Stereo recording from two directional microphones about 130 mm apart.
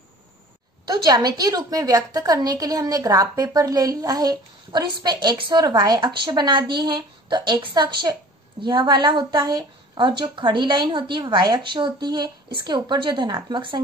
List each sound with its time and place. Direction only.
0.8 s a woman's voice: 35° right (ahead or behind)